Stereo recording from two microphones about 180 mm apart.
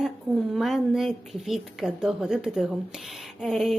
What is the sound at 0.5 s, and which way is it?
A woman's voice, centre (ahead or behind).